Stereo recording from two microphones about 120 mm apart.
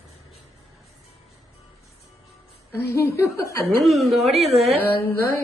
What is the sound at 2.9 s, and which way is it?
Speech, 25° left (ahead or behind).